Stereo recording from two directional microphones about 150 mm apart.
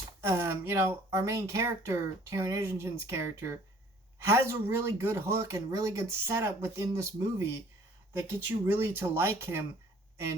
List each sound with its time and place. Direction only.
0.2 s speech: 15° right (ahead or behind)